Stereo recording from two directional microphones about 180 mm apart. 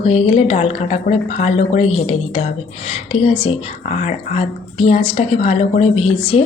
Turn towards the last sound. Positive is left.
turn(degrees=35)  # may be behind; listen again after turning